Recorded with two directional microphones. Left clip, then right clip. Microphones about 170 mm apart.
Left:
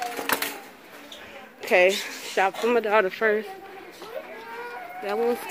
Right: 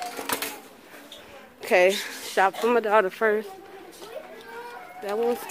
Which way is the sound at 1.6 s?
25° right (ahead or behind).